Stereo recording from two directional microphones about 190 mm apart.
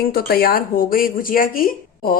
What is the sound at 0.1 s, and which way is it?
A woman's voice, 50° left (ahead or behind).